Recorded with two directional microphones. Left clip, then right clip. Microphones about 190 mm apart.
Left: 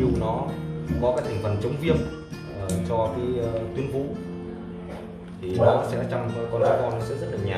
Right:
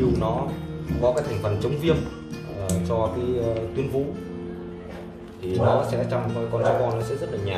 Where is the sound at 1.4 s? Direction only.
5° right (ahead or behind).